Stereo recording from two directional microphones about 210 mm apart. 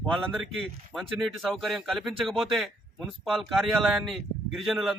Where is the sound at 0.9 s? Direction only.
Centre (ahead or behind).